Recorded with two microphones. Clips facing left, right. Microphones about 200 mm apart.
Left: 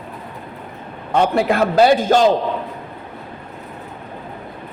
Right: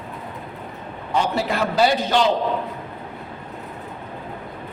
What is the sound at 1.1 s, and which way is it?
A man's voice, 55° left (ahead or behind).